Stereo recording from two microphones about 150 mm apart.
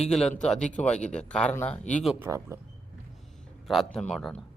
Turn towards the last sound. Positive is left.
turn(degrees=0)  # may be behind; listen again after turning